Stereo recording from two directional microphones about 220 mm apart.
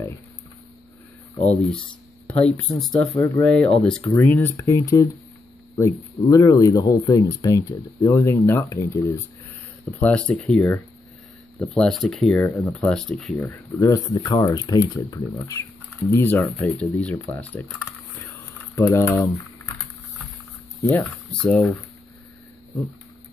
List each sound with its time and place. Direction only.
1.4 s speech: 30° left (ahead or behind)
2.2 s speech: 5° left (ahead or behind)
18.3 s typing: 15° left (ahead or behind)
21.0 s speech: 5° left (ahead or behind)